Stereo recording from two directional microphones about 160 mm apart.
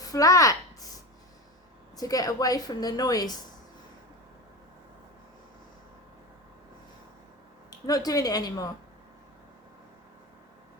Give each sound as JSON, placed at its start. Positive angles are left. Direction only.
{"t": 0.0, "sound": "a sound", "side_deg": 20}
{"t": 2.0, "sound": "a woman's voice", "side_deg": 20}
{"t": 7.9, "sound": "a woman's voice", "side_deg": 25}